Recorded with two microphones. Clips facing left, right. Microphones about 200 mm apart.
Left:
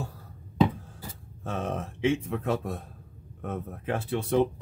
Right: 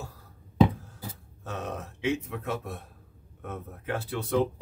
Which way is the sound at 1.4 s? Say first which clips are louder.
Left 4 dB; 30° left (ahead or behind).